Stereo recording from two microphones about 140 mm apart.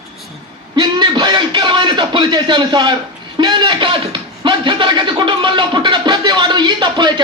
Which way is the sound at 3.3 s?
35° right (ahead or behind).